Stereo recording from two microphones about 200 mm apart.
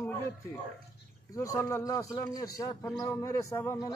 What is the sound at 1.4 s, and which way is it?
A man's voice, 15° left (ahead or behind).